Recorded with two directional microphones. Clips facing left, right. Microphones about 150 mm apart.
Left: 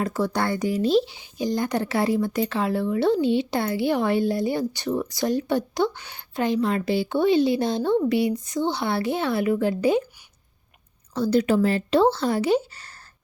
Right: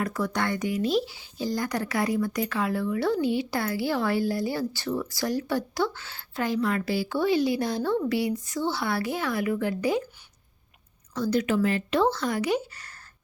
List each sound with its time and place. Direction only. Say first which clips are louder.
0.0 s speech: left 3 dB; 30° left (ahead or behind)
11.1 s speech: left 4 dB; 30° left (ahead or behind)